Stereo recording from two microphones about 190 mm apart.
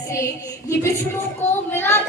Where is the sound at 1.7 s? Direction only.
10° left (ahead or behind).